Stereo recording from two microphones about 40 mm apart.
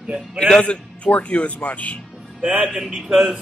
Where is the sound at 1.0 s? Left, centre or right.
Left.